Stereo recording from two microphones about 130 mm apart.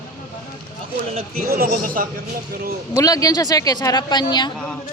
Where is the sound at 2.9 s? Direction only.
25° left (ahead or behind).